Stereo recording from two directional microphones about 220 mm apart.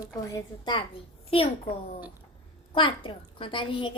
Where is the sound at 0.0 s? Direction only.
15° left (ahead or behind).